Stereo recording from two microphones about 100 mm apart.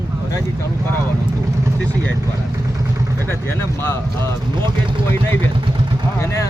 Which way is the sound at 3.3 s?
20° left (ahead or behind).